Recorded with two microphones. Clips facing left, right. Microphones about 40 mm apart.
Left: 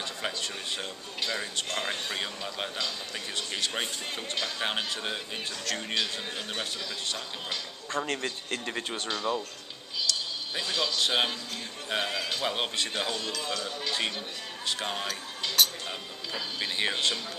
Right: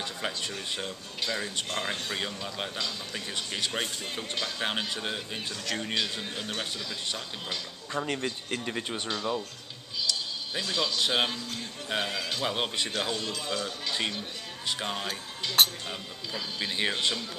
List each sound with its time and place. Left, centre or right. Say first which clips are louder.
0.0 s speech: even; centre
10.1 s music: even; centre
10.5 s speech: even; centre
15.6 s speech: right 2 dB; right
15.9 s speech: even; centre